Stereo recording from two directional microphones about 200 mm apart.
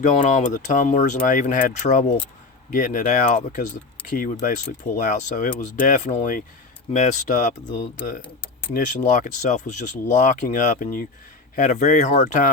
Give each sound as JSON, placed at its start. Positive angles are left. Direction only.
{"t": 0.0, "sound": "speech", "side_deg": 40}
{"t": 8.7, "sound": "speech", "side_deg": 40}